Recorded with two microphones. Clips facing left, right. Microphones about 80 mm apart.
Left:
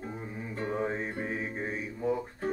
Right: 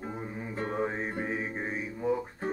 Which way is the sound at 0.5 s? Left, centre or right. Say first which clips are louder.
Even; right.